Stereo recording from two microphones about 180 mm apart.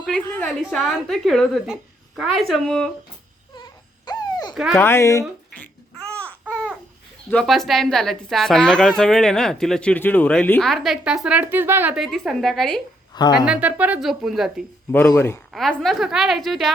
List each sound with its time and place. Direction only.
0.0 s a woman's voice: 5° left (ahead or behind)
4.0 s a sound: 20° left (ahead or behind)
4.7 s speech: 15° left (ahead or behind)
6.1 s babbling: 5° left (ahead or behind)
6.4 s babbling: 5° right (ahead or behind)
7.3 s a woman's voice: 5° left (ahead or behind)
15.1 s speech: 15° left (ahead or behind)
15.5 s a woman's voice: centre (ahead or behind)